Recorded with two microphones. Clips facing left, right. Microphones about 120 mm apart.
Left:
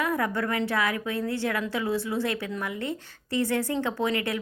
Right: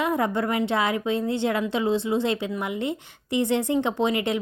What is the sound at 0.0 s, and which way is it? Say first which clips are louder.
A woman's voice: right 3 dB; 20° right (ahead or behind).